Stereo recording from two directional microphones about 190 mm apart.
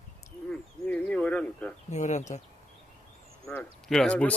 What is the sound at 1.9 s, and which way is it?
Speech, 40° left (ahead or behind).